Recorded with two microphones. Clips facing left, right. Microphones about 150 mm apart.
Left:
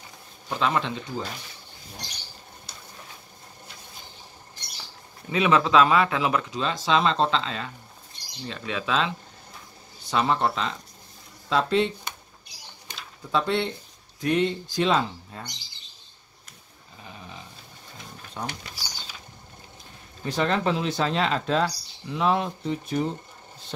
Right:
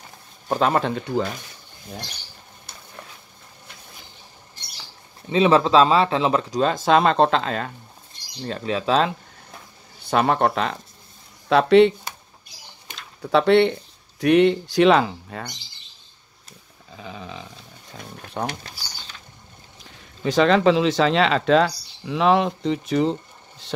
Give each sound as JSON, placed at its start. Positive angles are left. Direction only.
{"t": 0.5, "sound": "speech", "side_deg": -45}
{"t": 5.3, "sound": "speech", "side_deg": -30}
{"t": 10.0, "sound": "speech", "side_deg": -55}
{"t": 13.2, "sound": "speech", "side_deg": -70}
{"t": 16.9, "sound": "sheep", "side_deg": -90}
{"t": 17.9, "sound": "wild animals", "side_deg": -60}
{"t": 20.2, "sound": "speech", "side_deg": -90}